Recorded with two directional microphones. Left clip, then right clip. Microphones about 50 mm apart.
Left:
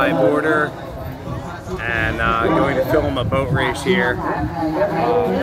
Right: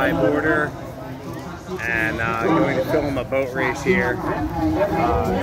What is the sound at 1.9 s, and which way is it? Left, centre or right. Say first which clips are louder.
Speech: left 3 dB; centre.